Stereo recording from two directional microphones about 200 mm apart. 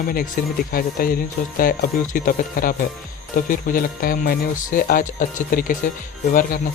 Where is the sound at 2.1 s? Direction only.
45° left (ahead or behind).